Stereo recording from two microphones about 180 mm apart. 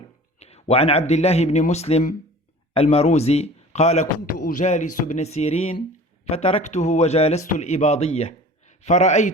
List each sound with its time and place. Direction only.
0.3 s a man's voice: 35° left (ahead or behind)